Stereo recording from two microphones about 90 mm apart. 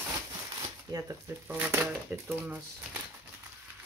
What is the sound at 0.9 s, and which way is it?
Speech, 50° right (ahead or behind).